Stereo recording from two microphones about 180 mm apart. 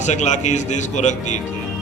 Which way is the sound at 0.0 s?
40° left (ahead or behind).